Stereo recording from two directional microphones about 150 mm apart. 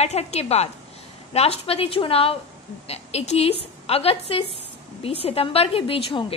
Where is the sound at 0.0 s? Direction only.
45° left (ahead or behind).